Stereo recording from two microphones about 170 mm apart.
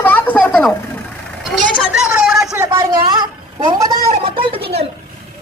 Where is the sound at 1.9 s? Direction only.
5° right (ahead or behind).